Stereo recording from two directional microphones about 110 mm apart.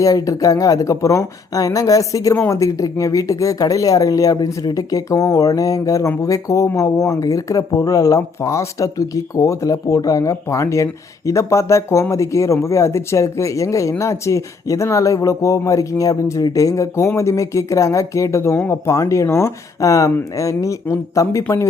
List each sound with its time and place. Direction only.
0.0 s speech: 30° left (ahead or behind)